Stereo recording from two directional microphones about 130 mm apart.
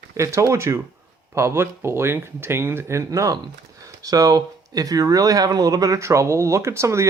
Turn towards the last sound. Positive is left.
turn(degrees=-20)  # may be behind; listen again after turning